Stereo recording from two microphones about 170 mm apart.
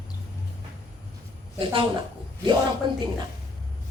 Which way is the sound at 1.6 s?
30° right (ahead or behind).